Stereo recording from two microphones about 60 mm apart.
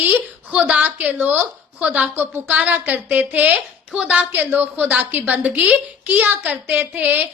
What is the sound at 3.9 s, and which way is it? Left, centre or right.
Speech, centre.